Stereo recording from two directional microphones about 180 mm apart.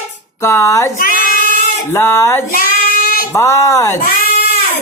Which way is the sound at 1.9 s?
15° left (ahead or behind).